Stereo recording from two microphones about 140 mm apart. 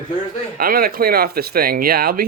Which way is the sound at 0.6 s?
90° right.